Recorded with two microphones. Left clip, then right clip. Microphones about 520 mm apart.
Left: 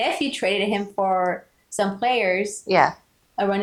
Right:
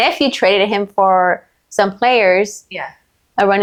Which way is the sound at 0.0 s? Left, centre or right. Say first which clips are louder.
Right 9 dB; right.